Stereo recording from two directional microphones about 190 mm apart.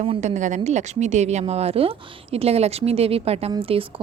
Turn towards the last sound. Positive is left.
turn(degrees=-30)  # may be behind; listen again after turning